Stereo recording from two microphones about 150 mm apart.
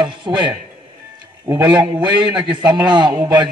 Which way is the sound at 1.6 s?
30° right (ahead or behind).